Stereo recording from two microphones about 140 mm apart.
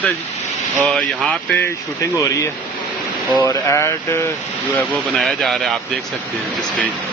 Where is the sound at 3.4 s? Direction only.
20° left (ahead or behind).